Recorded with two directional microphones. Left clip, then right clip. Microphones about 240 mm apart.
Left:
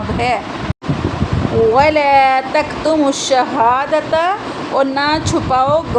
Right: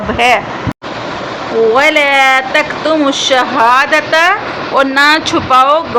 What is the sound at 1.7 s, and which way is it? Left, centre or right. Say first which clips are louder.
Speech: right 1 dB; centre.